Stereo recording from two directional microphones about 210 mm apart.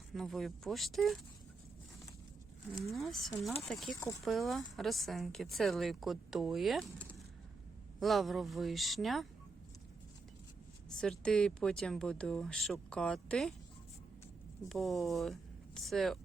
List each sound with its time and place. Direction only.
0.1 s speech: centre (ahead or behind)
2.9 s speech: centre (ahead or behind)
11.0 s speech: 5° left (ahead or behind)
14.7 s speech: centre (ahead or behind)